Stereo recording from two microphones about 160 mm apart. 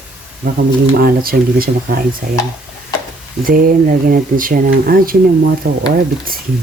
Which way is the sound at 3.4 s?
60° right (ahead or behind).